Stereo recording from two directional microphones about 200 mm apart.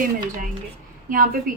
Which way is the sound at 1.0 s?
45° right (ahead or behind).